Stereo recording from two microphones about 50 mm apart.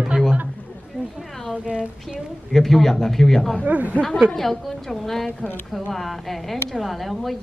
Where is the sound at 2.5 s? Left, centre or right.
Centre.